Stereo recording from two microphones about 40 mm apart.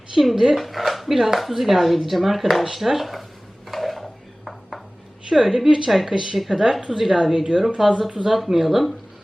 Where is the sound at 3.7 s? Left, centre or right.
Centre.